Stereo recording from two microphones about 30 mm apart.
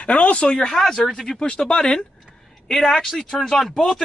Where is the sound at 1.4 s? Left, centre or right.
Left.